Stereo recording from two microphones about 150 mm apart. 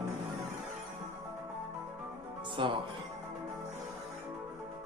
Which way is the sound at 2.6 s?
35° right (ahead or behind).